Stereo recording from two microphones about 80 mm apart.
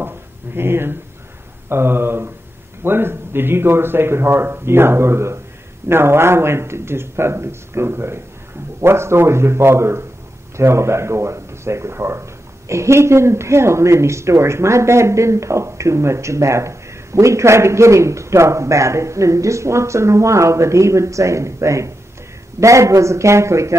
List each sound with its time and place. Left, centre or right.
0.6 s speech: right